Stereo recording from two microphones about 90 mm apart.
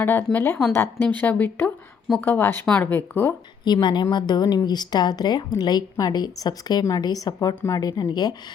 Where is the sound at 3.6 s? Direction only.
55° left (ahead or behind).